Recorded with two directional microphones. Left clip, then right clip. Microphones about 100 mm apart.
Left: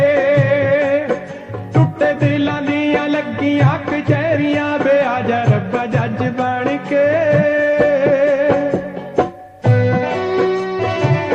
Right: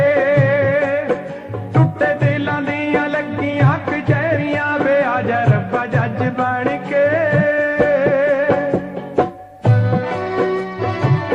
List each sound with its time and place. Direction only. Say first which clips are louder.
0.1 s music: left 1 dB; 25° right (ahead or behind)
5.7 s music: even; 20° right (ahead or behind)
6.3 s music: left 1 dB; 40° right (ahead or behind)
9.6 s music: left 3 dB; 30° right (ahead or behind)